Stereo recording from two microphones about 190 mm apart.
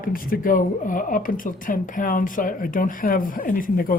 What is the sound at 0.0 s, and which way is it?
Speech, 45° left (ahead or behind).